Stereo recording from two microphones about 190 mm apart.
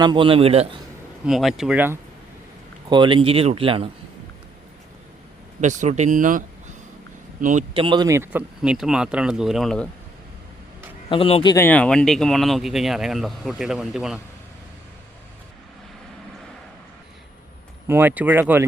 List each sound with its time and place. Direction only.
0.0 s speech: 25° right (ahead or behind)
1.2 s speech: centre (ahead or behind)
2.9 s speech: 25° right (ahead or behind)
5.5 s speech: 40° right (ahead or behind)
7.4 s speech: 35° right (ahead or behind); by 9.9 s 5° left (ahead or behind)
11.1 s a man's voice: 30° left (ahead or behind)
11.5 s speech: 10° left (ahead or behind)
17.8 s speech: 10° right (ahead or behind)